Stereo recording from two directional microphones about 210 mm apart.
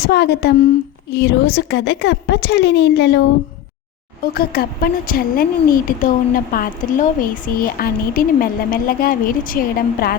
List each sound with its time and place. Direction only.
0.0 s a woman's voice: 50° left (ahead or behind)
4.4 s a woman's voice: 45° left (ahead or behind)